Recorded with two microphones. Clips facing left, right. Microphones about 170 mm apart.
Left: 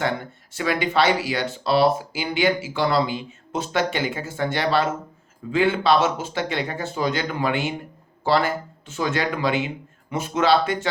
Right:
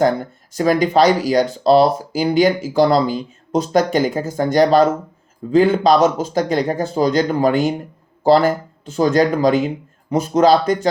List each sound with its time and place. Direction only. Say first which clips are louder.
0.0 s speech: right 9 dB; 40° right (ahead or behind)